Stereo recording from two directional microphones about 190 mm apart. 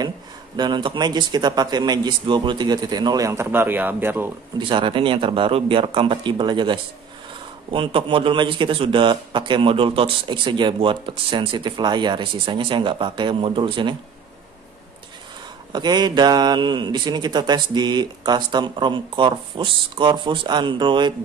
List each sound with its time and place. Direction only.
0.6 s a man's voice: 25° right (ahead or behind)
4.6 s a man's voice: 25° right (ahead or behind)
15.7 s a man's voice: 20° right (ahead or behind)